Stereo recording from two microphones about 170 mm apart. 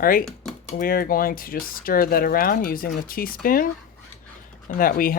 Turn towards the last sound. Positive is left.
turn(degrees=55)  # may be behind; listen again after turning